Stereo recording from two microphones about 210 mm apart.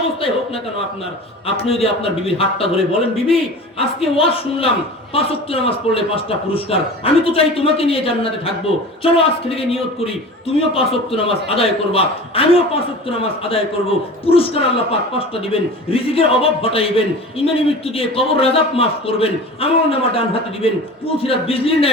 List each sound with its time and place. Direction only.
0.2 s a man's voice: 25° left (ahead or behind)
1.6 s a man's voice: 30° left (ahead or behind)